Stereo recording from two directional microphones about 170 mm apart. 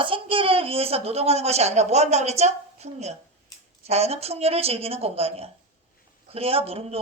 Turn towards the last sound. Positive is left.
turn(degrees=-35)  # may be behind; listen again after turning